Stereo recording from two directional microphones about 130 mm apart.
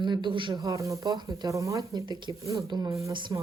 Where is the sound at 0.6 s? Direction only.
25° right (ahead or behind).